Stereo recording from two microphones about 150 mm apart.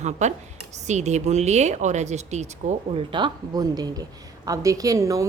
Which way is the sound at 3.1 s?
30° right (ahead or behind).